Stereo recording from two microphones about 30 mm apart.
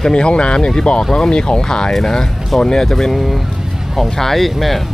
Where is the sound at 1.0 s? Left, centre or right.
Centre.